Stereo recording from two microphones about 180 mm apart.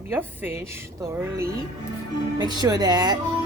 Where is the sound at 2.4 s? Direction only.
25° right (ahead or behind).